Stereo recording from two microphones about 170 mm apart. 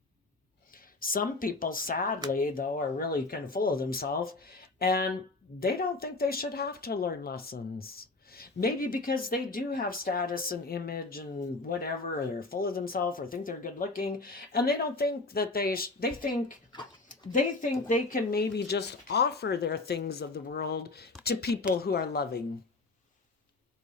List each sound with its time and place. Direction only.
0.7 s speech: 55° left (ahead or behind)